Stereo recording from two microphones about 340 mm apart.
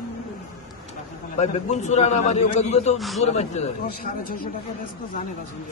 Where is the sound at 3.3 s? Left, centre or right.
Centre.